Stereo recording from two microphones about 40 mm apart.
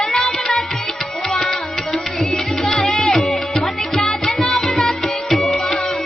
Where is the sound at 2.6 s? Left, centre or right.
Centre.